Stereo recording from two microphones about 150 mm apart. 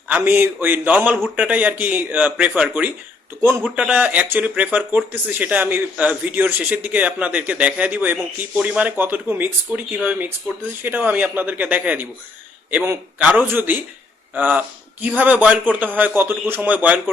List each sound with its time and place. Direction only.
0.1 s speech: 10° right (ahead or behind)